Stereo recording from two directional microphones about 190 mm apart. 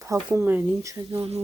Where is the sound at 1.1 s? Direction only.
35° right (ahead or behind).